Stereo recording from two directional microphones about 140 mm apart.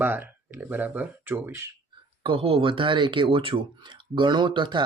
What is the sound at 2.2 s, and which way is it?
Speech, 40° right (ahead or behind).